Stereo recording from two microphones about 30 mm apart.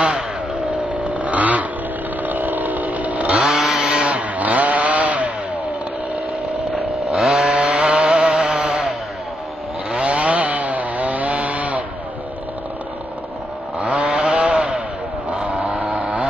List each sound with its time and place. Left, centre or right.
0.7 s a sound: right
2.2 s chainsaw: right
3.4 s chainsaw: centre
3.9 s chainsaw: right
7.1 s chainsaw: centre
7.3 s chainsaw: right
8.5 s a sound: right
10.0 s chainsaw: right
13.7 s chainsaw: right
14.0 s chainsaw: right
15.3 s vehicle: right
15.6 s vehicle: right